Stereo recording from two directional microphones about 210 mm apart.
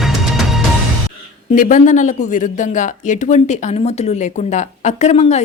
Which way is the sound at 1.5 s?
40° left (ahead or behind).